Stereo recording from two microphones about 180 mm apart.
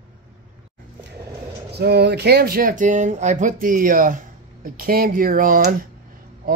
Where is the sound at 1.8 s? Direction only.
65° right (ahead or behind).